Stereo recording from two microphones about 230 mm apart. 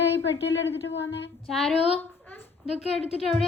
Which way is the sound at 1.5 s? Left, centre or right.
Centre.